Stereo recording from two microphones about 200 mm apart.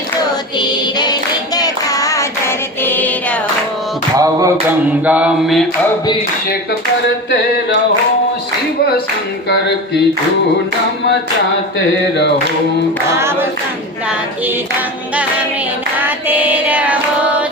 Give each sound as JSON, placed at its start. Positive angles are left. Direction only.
{"t": 0.6, "sound": "music", "side_deg": 20}
{"t": 1.5, "sound": "child singing", "side_deg": 15}
{"t": 4.2, "sound": "music", "side_deg": -15}
{"t": 5.0, "sound": "mantra", "side_deg": -5}
{"t": 9.5, "sound": "a sound", "side_deg": 55}
{"t": 13.1, "sound": "music", "side_deg": -15}
{"t": 16.0, "sound": "child singing", "side_deg": -10}